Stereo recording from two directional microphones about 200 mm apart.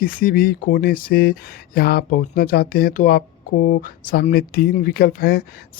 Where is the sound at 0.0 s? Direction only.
45° left (ahead or behind).